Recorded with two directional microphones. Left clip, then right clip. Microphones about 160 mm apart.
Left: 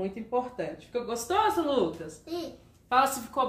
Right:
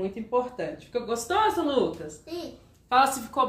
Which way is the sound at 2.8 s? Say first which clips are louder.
Right 3 dB; centre (ahead or behind).